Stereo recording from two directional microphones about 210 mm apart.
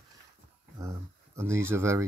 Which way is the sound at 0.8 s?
15° right (ahead or behind).